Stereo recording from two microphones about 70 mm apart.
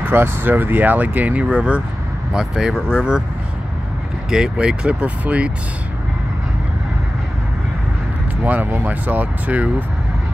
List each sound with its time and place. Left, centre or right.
0.0 s speech: right
2.3 s speech: centre
4.3 s speech: centre
8.5 s speech: right